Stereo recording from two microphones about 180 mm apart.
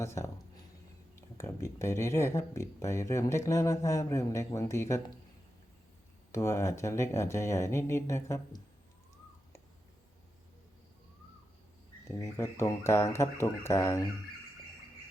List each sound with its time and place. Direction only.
0.0 s speech: 15° left (ahead or behind)
6.3 s speech: 15° left (ahead or behind)
12.0 s speech: 15° left (ahead or behind)